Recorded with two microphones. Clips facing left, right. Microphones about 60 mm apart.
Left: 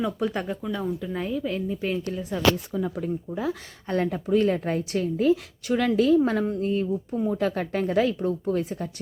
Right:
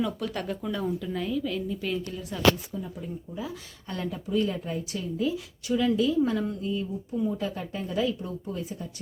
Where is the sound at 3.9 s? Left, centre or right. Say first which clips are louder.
Left 7 dB; left.